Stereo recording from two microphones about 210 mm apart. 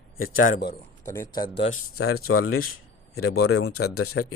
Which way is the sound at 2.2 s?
90° left.